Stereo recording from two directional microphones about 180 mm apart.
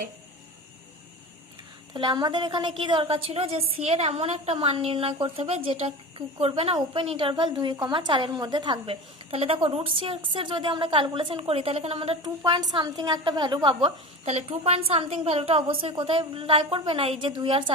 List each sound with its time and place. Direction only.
1.9 s a woman's voice: 25° right (ahead or behind)
12.2 s a woman's voice: 20° right (ahead or behind)